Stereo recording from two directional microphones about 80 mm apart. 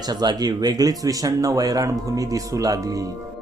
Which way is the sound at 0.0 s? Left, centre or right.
Right.